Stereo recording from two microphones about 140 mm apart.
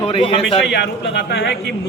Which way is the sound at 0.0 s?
40° left (ahead or behind).